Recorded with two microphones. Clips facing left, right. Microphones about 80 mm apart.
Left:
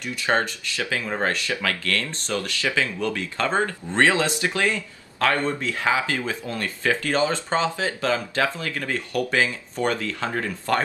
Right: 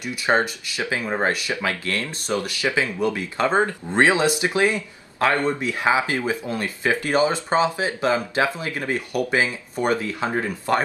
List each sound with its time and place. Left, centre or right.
0.0 s speech: centre